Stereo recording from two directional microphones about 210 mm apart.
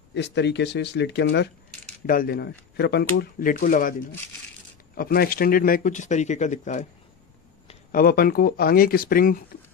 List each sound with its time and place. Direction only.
0.1 s speech: 55° left (ahead or behind); by 3.9 s 40° left (ahead or behind)
4.9 s speech: 45° left (ahead or behind)
7.9 s speech: 45° left (ahead or behind)